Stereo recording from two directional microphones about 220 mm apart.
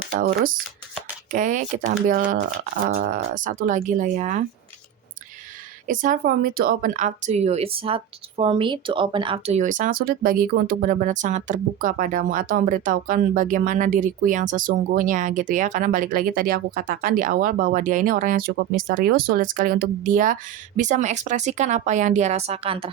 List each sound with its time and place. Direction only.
1.3 s speech: 35° right (ahead or behind)
5.9 s speech: 35° right (ahead or behind)